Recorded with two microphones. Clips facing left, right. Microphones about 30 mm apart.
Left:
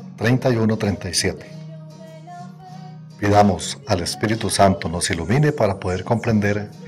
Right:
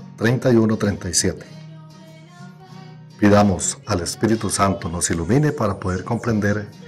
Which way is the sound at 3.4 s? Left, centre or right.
Left.